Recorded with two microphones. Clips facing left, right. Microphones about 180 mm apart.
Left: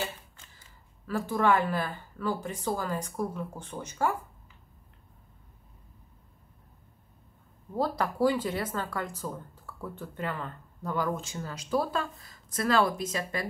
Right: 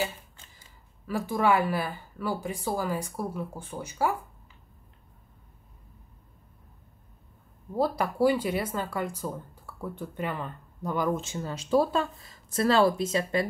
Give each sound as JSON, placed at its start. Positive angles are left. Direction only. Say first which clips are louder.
{"t": 1.0, "sound": "speech", "louder": "right 1 dB", "side_deg": -10}
{"t": 7.7, "sound": "speech", "louder": "right 2 dB", "side_deg": -10}